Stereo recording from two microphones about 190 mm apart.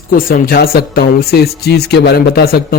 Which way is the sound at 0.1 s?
50° left (ahead or behind).